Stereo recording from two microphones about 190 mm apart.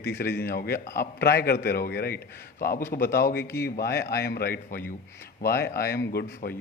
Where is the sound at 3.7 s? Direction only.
55° left (ahead or behind).